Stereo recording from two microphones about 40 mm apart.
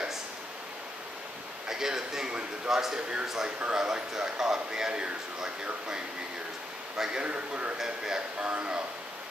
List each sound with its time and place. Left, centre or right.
1.7 s speech: centre
3.4 s speech: right
3.7 s speech: centre
7.0 s speech: centre
7.2 s a man's voice: right
7.7 s speech: centre
8.5 s speech: right